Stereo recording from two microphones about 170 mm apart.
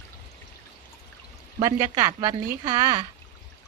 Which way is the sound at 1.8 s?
20° right (ahead or behind).